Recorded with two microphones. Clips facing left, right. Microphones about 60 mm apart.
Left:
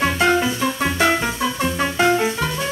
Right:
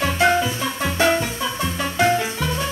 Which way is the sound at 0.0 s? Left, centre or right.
Left.